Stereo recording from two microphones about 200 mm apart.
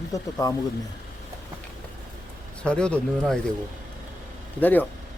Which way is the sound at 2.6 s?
5° left (ahead or behind).